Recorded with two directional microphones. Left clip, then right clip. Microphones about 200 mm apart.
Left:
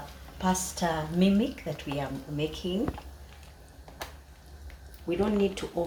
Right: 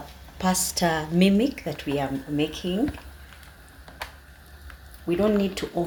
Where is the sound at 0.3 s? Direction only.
55° right (ahead or behind).